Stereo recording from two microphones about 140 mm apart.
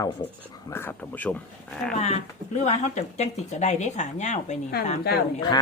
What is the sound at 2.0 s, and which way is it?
Speech, 50° left (ahead or behind).